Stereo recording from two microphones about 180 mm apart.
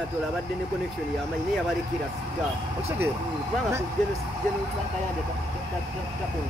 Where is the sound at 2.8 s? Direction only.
15° right (ahead or behind).